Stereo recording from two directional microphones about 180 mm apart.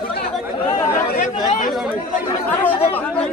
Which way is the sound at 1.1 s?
50° left (ahead or behind).